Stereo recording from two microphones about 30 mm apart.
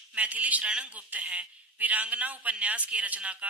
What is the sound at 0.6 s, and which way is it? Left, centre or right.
Speech, right.